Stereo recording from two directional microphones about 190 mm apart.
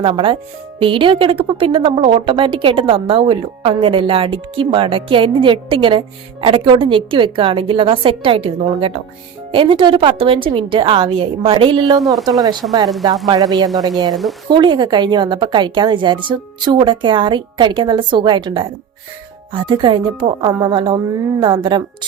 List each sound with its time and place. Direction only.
0.0 s a woman's voice: 30° right (ahead or behind)
14.1 s speech: centre (ahead or behind)
14.5 s a woman's voice: 25° right (ahead or behind)